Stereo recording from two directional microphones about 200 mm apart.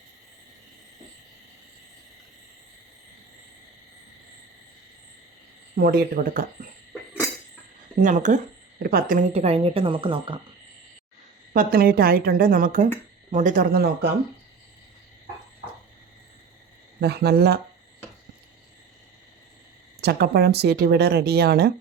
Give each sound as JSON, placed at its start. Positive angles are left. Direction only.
{"t": 5.7, "sound": "speech", "side_deg": -45}
{"t": 7.9, "sound": "speech", "side_deg": -40}
{"t": 11.5, "sound": "speech", "side_deg": -50}
{"t": 17.0, "sound": "speech", "side_deg": -55}
{"t": 20.0, "sound": "speech", "side_deg": -55}